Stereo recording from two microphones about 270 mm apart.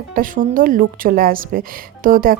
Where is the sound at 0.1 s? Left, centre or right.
Right.